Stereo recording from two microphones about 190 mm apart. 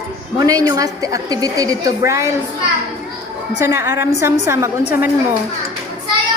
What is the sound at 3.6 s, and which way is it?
A woman's voice, 15° right (ahead or behind).